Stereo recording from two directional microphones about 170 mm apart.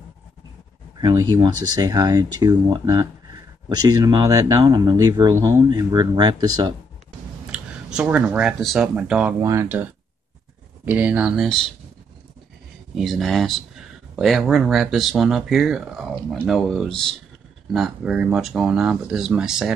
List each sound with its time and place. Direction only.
1.0 s speech: 25° right (ahead or behind)
7.5 s speech: 5° right (ahead or behind)
9.4 s speech: 15° right (ahead or behind)
10.9 s speech: 10° right (ahead or behind)
12.9 s speech: centre (ahead or behind)